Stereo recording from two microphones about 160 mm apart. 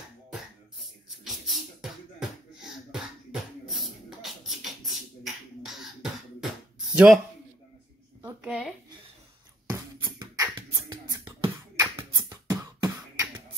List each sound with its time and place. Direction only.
0.3 s music: centre (ahead or behind)
8.2 s a sound: 10° right (ahead or behind)
9.7 s beatboxing: 20° right (ahead or behind)